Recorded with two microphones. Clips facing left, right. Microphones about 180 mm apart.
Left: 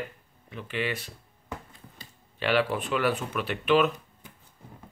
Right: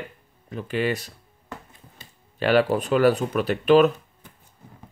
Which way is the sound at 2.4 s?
40° right (ahead or behind).